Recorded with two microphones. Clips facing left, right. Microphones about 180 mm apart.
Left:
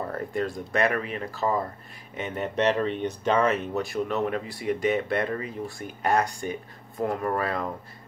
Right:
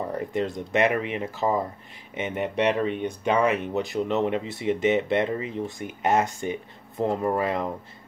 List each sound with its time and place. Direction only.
0.0 s speech: 15° right (ahead or behind)